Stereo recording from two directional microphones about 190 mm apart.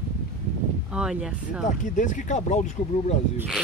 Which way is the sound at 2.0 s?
40° left (ahead or behind).